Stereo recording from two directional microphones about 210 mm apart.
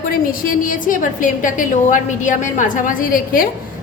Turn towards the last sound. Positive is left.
turn(degrees=40)  # may be behind; listen again after turning